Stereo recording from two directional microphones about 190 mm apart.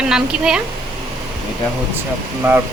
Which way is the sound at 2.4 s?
10° right (ahead or behind).